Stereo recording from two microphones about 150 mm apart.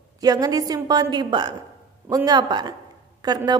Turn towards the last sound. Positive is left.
turn(degrees=-25)  # may be behind; listen again after turning